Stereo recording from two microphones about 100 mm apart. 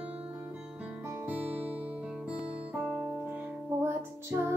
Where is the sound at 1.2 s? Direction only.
15° right (ahead or behind).